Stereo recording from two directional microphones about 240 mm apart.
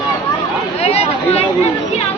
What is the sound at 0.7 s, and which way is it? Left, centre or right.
Speech, left.